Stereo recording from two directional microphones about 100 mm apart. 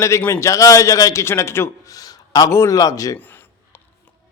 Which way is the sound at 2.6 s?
40° left (ahead or behind).